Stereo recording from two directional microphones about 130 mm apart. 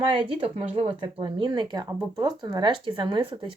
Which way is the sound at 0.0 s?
40° right (ahead or behind).